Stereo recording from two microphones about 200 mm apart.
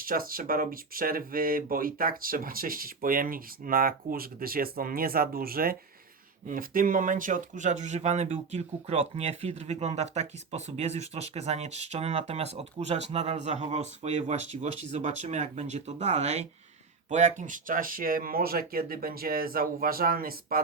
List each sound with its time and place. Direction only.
0.0 s speech: 45° right (ahead or behind)